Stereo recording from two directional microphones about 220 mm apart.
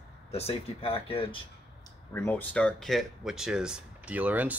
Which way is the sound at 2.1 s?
10° left (ahead or behind).